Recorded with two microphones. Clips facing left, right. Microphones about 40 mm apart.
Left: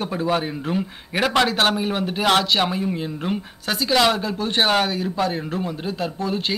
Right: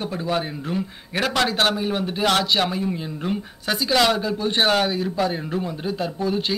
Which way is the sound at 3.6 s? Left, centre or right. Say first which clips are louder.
Left 1 dB; centre.